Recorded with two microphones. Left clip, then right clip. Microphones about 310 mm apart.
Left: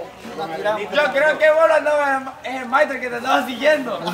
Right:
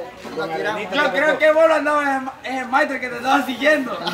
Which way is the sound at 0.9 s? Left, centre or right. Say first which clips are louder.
Even; centre.